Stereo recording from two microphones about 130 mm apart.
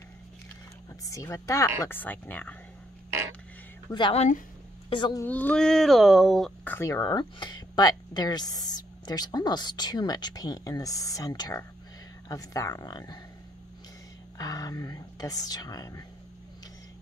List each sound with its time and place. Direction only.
1.0 s speech: 25° left (ahead or behind)
1.9 s speech: 15° left (ahead or behind)
3.9 s speech: 30° left (ahead or behind)
4.8 s a sound: 40° left (ahead or behind)
5.2 s speech: 10° left (ahead or behind)
6.6 s speech: 15° left (ahead or behind)
6.9 s speech: 30° left (ahead or behind)
14.4 s speech: 30° left (ahead or behind)